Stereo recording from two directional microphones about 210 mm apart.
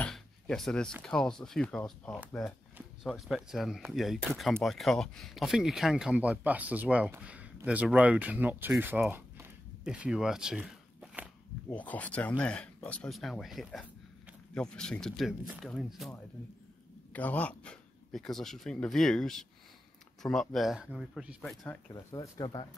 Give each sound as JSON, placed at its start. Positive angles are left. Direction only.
{"t": 0.0, "sound": "a sound", "side_deg": 0}
{"t": 1.0, "sound": "speech", "side_deg": 5}
{"t": 11.7, "sound": "speech", "side_deg": 5}
{"t": 21.9, "sound": "speech", "side_deg": 20}